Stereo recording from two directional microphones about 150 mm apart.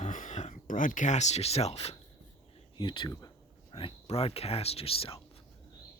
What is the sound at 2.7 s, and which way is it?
Speech, 30° left (ahead or behind).